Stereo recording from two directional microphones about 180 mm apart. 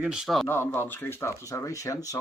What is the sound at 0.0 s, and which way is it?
Speech, 5° right (ahead or behind).